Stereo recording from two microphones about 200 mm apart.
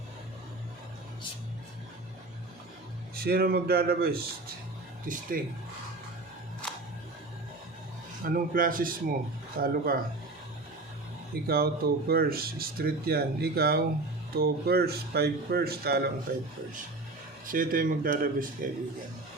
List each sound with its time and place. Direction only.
3.2 s speech: 50° right (ahead or behind)
8.2 s speech: 45° right (ahead or behind)
11.4 s speech: 50° right (ahead or behind)
17.4 s speech: 45° right (ahead or behind)